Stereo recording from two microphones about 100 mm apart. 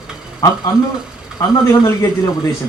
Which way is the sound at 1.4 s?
35° left (ahead or behind).